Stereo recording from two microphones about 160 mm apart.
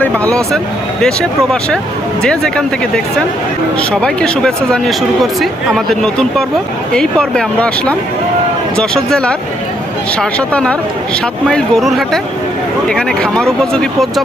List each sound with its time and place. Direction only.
0.0 s speech: 5° left (ahead or behind)
2.2 s speech: 5° left (ahead or behind)